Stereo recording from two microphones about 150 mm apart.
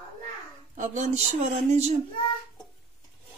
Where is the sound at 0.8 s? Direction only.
55° right (ahead or behind).